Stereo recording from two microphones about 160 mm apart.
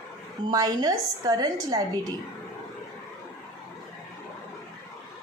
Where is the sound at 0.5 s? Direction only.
25° right (ahead or behind).